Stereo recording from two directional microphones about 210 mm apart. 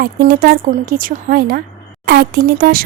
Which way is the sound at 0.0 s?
50° right (ahead or behind).